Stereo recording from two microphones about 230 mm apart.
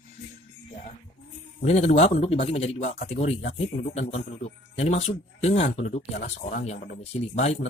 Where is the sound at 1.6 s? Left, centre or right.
Left.